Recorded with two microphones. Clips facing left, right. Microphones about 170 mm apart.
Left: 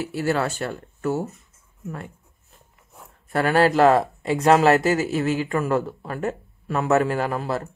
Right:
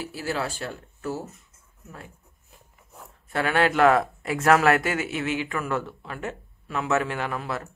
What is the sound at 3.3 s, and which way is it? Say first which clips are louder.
Speech: left 4 dB; 40° left (ahead or behind).